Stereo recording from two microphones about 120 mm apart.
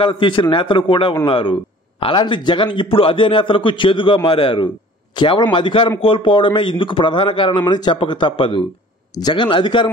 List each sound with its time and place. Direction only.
0.0 s a man's voice: 40° left (ahead or behind)